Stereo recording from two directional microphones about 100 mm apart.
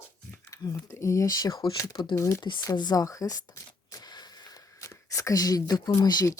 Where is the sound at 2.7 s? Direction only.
40° left (ahead or behind).